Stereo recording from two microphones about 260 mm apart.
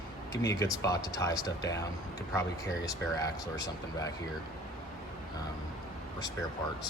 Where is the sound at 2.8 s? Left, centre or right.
Centre.